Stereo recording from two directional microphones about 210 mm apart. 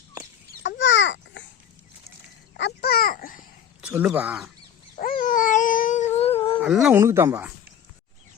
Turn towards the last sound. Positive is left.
turn(degrees=-10)  # may be behind; listen again after turning